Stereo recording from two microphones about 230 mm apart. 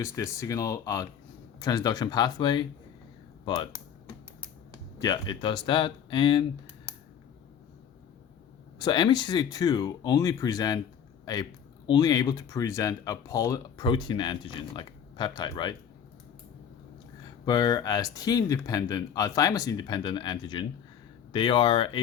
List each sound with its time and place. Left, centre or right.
0.0 s speech: centre
4.9 s speech: centre
8.8 s speech: centre
17.4 s speech: centre